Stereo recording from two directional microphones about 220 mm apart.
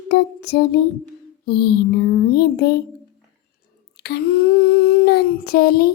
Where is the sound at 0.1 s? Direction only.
50° left (ahead or behind).